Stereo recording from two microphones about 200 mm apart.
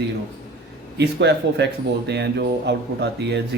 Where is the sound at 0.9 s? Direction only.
60° right (ahead or behind).